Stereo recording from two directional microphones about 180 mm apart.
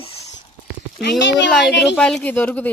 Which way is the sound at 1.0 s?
80° left.